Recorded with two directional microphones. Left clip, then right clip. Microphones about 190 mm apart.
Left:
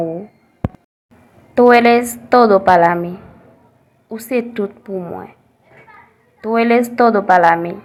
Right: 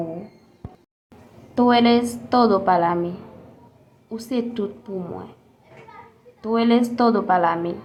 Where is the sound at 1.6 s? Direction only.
30° left (ahead or behind).